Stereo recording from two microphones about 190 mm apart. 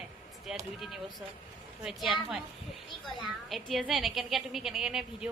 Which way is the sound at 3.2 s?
Centre (ahead or behind).